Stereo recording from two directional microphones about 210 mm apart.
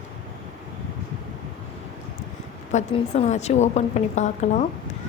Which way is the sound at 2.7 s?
30° left (ahead or behind).